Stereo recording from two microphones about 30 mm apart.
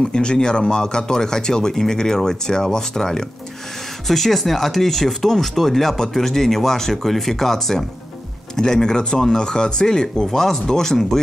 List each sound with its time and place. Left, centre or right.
0.1 s speech: left
4.1 s speech: centre